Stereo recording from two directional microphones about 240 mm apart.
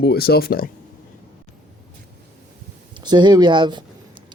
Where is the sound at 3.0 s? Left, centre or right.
Centre.